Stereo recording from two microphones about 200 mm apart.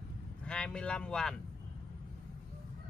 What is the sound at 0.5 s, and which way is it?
Speech, 5° left (ahead or behind).